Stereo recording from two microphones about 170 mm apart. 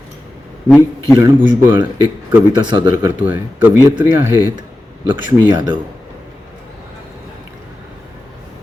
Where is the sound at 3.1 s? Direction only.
10° right (ahead or behind).